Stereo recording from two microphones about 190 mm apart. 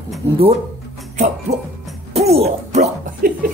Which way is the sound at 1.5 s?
35° right (ahead or behind).